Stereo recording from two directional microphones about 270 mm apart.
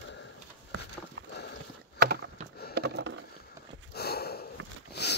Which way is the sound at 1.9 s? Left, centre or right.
Right.